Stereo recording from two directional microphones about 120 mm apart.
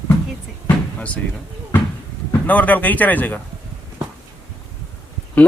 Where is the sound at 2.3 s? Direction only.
15° left (ahead or behind).